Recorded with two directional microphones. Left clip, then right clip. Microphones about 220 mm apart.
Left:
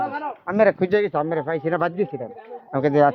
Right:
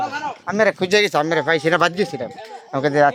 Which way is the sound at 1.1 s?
50° right (ahead or behind).